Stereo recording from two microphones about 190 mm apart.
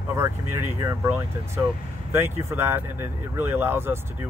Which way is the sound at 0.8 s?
15° right (ahead or behind).